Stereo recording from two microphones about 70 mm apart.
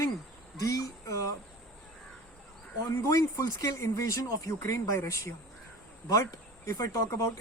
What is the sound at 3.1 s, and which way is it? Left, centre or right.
Speech, left.